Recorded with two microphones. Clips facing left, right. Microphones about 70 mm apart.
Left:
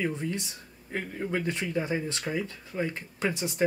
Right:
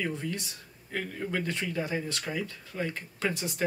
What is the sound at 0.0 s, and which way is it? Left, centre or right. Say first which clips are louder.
Speech: left 2 dB; left.